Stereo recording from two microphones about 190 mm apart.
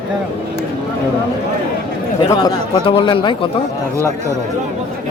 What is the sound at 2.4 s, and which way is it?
Speech, 25° left (ahead or behind).